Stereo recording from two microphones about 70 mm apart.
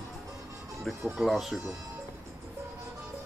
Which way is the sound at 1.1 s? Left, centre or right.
Centre.